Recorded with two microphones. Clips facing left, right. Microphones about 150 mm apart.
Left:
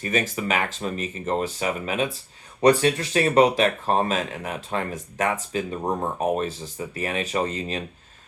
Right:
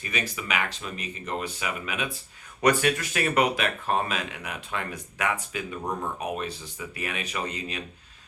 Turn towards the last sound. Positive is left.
turn(degrees=40)  # may be behind; listen again after turning